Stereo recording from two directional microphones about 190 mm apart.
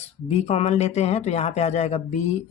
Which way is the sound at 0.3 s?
35° left (ahead or behind).